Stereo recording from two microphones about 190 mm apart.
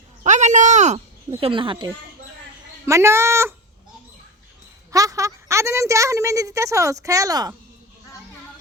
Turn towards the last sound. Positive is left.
turn(degrees=-20)  # may be behind; listen again after turning